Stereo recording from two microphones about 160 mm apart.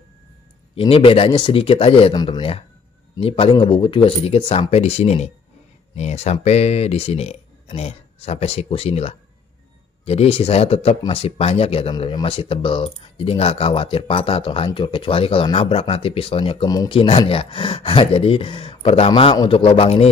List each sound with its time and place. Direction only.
0.7 s speech: 35° left (ahead or behind)
17.0 s speech: 35° left (ahead or behind)